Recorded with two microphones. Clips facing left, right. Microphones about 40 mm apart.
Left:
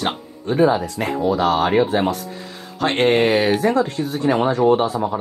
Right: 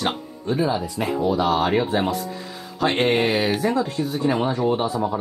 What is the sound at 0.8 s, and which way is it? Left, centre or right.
Speech, left.